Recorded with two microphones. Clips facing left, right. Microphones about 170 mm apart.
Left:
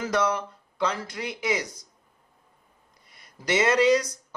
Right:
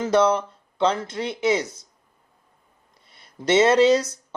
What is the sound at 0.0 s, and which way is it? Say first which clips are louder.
Speech: right 6 dB; 25° right (ahead or behind).